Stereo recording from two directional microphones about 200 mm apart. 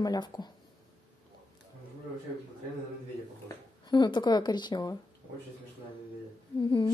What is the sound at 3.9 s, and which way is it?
Speech, 20° left (ahead or behind).